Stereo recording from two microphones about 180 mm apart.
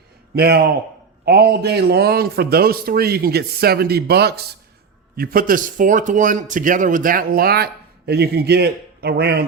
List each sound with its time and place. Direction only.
0.3 s a man's voice: 65° right (ahead or behind)